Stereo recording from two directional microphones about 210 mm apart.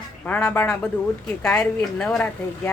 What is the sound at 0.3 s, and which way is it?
A man's voice, 5° left (ahead or behind).